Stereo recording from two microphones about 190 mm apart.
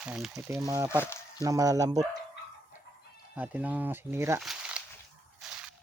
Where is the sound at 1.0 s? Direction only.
15° left (ahead or behind).